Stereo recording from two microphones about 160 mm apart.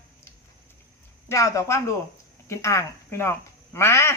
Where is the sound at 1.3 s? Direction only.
20° left (ahead or behind).